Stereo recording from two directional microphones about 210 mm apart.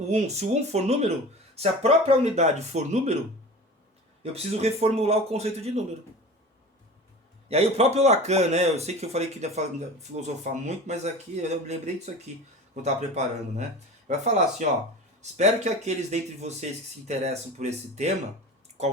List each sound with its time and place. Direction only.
0.1 s speech: 35° right (ahead or behind)
4.2 s a man's voice: 30° right (ahead or behind)
7.4 s speech: 30° right (ahead or behind)